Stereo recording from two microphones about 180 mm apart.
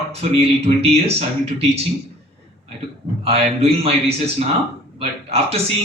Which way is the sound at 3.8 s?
35° right (ahead or behind).